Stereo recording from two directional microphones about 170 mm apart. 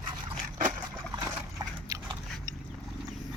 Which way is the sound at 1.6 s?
20° right (ahead or behind).